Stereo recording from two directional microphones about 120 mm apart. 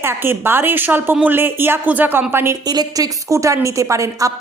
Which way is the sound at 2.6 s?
30° right (ahead or behind).